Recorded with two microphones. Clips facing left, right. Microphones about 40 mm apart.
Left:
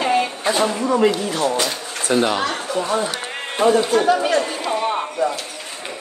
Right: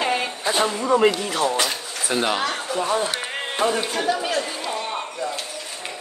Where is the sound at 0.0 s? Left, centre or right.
Centre.